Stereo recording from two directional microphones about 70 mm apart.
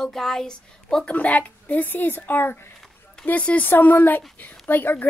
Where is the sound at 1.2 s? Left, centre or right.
Left.